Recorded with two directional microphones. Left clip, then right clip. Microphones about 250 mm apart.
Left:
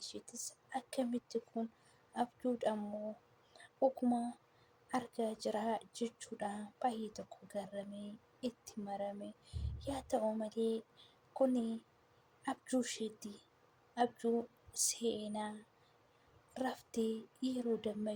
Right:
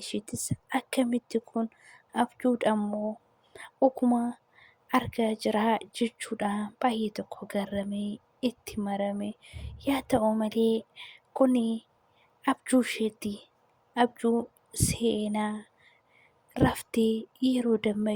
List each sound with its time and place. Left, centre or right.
0.1 s speech: right
16.6 s speech: right